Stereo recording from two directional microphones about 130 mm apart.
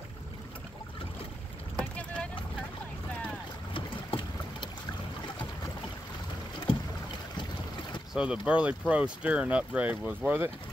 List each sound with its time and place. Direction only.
1.8 s vehicle: 10° left (ahead or behind)
3.7 s boat: 40° left (ahead or behind)
8.1 s speech: 5° right (ahead or behind)